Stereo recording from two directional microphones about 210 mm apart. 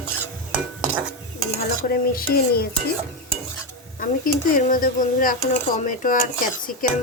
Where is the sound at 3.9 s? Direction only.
40° left (ahead or behind).